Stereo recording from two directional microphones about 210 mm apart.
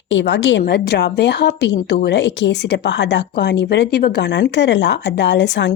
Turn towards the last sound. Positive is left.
turn(degrees=55)  # may be behind; listen again after turning